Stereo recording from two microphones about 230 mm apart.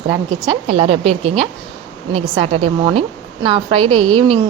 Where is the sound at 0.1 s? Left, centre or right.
Right.